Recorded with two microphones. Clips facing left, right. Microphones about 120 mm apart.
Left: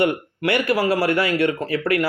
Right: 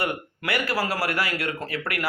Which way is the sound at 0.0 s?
25° left (ahead or behind).